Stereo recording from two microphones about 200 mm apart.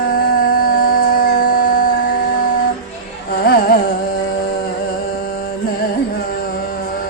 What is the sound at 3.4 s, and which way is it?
Carnatic music, 45° left (ahead or behind).